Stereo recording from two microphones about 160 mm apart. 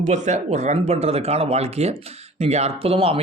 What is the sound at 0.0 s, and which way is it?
Speech, 45° right (ahead or behind).